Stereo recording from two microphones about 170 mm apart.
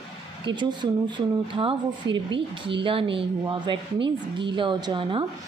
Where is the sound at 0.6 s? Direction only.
25° right (ahead or behind).